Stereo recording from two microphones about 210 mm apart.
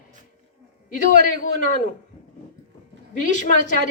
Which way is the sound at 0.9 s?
35° left (ahead or behind).